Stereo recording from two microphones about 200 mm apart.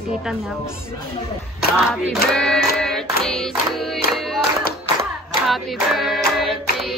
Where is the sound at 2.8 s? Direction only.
Centre (ahead or behind).